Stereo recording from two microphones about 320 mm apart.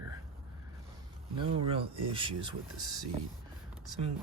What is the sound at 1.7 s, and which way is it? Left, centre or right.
Speech, centre.